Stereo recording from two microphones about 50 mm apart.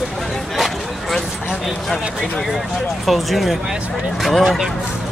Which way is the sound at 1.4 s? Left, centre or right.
Centre.